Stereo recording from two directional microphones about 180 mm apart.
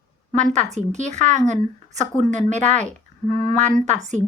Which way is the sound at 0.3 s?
40° right (ahead or behind).